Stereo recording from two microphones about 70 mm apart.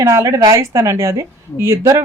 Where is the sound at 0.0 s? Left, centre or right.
Right.